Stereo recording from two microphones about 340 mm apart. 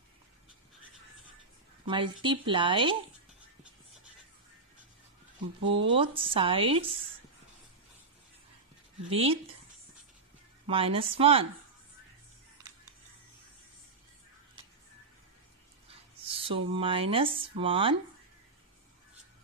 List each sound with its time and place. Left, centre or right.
1.9 s speech: centre
5.7 s speech: centre
9.1 s speech: centre
10.7 s speech: centre
15.9 s speech: centre